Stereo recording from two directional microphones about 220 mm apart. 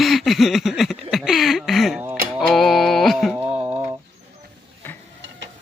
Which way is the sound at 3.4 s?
25° right (ahead or behind).